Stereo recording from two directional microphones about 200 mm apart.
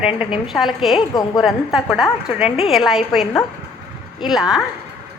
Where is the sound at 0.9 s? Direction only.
25° left (ahead or behind).